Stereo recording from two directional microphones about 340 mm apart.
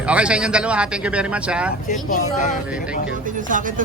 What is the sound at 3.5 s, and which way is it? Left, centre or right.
Speech, right.